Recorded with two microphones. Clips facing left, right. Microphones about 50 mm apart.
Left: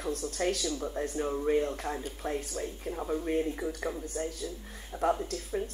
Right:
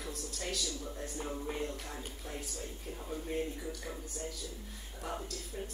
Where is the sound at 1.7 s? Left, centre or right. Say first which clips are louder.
Left 8 dB; left.